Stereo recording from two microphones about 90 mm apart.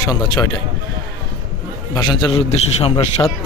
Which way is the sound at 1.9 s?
55° left (ahead or behind).